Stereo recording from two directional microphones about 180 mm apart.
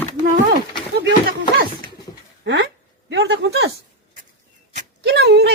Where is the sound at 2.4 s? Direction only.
75° right (ahead or behind).